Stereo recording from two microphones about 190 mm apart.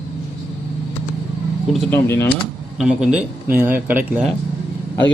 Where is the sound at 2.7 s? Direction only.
5° right (ahead or behind).